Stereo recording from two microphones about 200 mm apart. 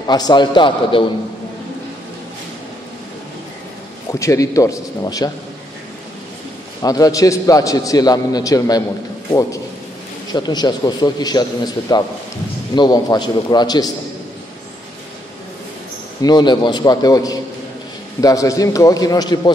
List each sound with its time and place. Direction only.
0.0 s a man's voice: 20° left (ahead or behind)
4.1 s a man's voice: 15° left (ahead or behind)
6.8 s a man's voice: 20° left (ahead or behind)
16.2 s a man's voice: 20° left (ahead or behind)